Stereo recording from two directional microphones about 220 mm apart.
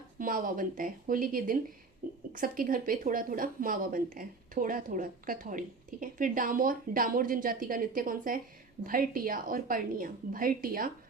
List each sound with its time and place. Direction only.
0.2 s a woman's voice: 40° right (ahead or behind)